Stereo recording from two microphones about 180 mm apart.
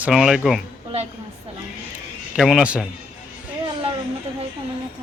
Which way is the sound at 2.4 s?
Centre (ahead or behind).